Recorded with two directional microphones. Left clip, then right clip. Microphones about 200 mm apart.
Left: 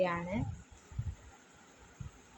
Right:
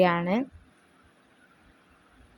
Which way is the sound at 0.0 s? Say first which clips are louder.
Right 10 dB; 40° right (ahead or behind).